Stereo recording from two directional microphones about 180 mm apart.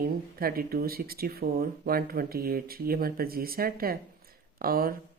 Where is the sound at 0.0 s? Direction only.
55° right (ahead or behind).